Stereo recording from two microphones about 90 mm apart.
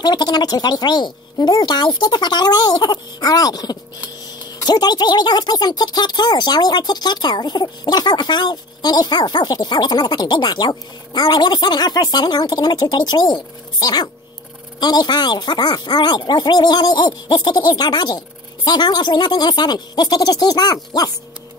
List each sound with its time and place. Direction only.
0.0 s speech: 50° left (ahead or behind)